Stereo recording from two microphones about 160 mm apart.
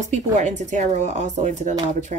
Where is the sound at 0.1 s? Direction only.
50° right (ahead or behind).